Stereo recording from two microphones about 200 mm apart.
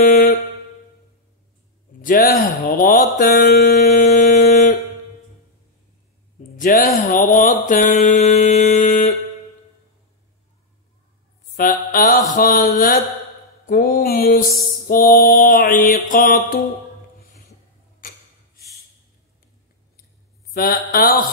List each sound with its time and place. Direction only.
0.0 s a sound: 40° left (ahead or behind)
2.8 s mantra: 40° left (ahead or behind)
3.3 s a sound: 40° left (ahead or behind)
6.6 s mantra: 40° left (ahead or behind)
11.5 s mantra: 45° left (ahead or behind)
20.5 s mantra: 50° left (ahead or behind)